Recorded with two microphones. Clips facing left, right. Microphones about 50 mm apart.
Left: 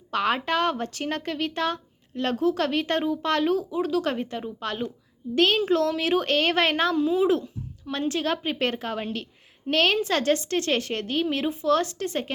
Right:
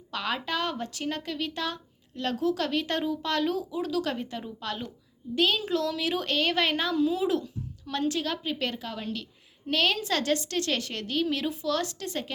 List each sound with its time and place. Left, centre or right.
0.1 s speech: left
3.0 s speech: left
3.2 s speech: left
5.3 s speech: left